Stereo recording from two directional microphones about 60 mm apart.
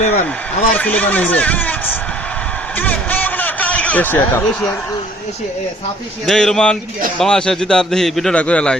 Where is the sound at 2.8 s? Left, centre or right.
Left.